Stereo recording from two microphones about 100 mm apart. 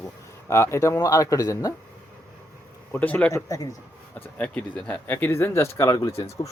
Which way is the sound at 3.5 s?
35° left (ahead or behind).